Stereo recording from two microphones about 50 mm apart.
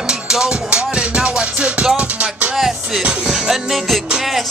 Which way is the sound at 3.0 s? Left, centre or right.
Centre.